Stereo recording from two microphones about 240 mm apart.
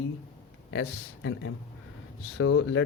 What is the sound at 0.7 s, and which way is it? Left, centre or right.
Speech, left.